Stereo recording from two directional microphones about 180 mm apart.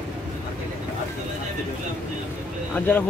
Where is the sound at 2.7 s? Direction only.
10° left (ahead or behind).